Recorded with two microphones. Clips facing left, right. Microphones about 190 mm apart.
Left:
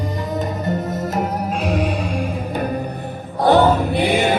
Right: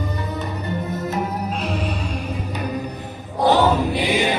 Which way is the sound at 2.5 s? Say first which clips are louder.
Left 4 dB; 50° left (ahead or behind).